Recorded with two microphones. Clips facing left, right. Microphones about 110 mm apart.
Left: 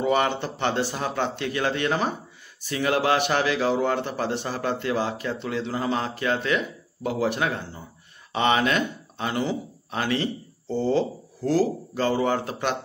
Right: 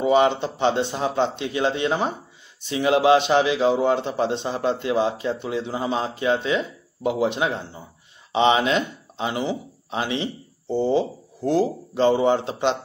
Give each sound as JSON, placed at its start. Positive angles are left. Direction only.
{"t": 0.0, "sound": "a man's voice", "side_deg": -20}